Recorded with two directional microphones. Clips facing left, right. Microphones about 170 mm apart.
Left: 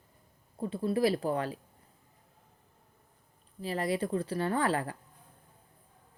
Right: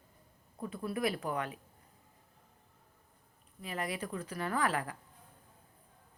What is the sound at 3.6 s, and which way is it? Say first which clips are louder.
Speech: left 7 dB; 30° left (ahead or behind).